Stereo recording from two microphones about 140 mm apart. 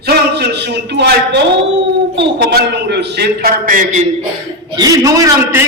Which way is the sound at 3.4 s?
75° right (ahead or behind).